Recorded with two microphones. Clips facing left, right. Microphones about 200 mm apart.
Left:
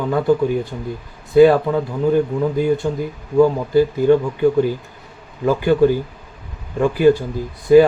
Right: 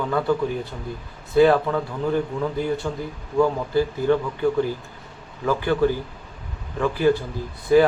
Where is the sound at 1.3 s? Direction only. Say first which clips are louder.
Left 5 dB; 15° left (ahead or behind).